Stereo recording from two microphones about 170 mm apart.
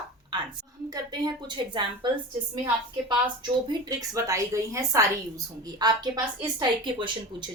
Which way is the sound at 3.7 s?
25° right (ahead or behind).